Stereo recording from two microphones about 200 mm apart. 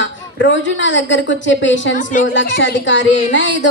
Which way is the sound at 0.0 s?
65° left (ahead or behind).